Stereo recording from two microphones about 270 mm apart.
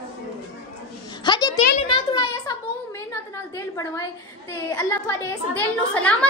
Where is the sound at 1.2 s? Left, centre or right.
Centre.